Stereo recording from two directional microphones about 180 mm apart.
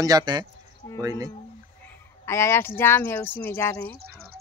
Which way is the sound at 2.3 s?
15° left (ahead or behind).